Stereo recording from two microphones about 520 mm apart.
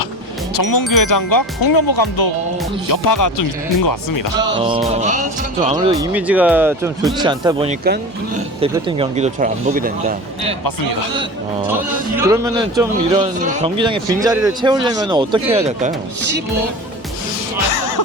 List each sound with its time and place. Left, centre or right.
0.5 s ding: left
4.6 s speech: centre
11.7 s speech: centre
17.7 s music: left